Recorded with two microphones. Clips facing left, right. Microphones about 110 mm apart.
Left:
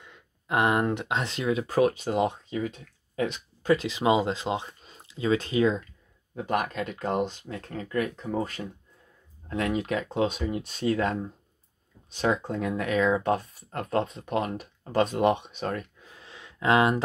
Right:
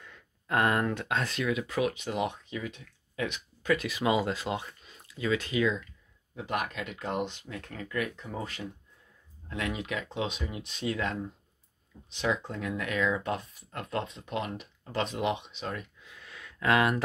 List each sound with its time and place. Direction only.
0.0 s speech: 20° left (ahead or behind); by 5.9 s 35° left (ahead or behind)
6.3 s speech: 45° left (ahead or behind); by 17.0 s 25° left (ahead or behind)